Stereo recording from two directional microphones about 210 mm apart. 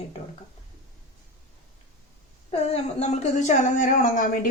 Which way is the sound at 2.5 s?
30° left (ahead or behind).